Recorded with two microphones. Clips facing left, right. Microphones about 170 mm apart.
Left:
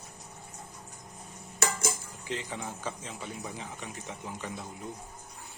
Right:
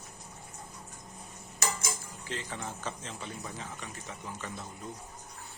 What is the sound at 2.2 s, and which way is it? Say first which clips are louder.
Speech: left 2 dB; 15° left (ahead or behind).